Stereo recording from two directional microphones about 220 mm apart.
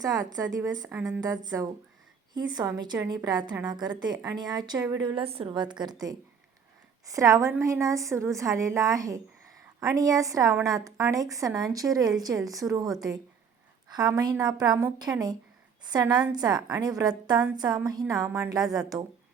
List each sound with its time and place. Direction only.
0.0 s a woman's voice: 15° right (ahead or behind)
16.6 s a woman's voice: 5° right (ahead or behind)
16.8 s a woman's voice: 20° right (ahead or behind)
17.3 s a woman's voice: 5° right (ahead or behind)
17.6 s a woman's voice: 20° right (ahead or behind)
18.6 s a woman's voice: centre (ahead or behind)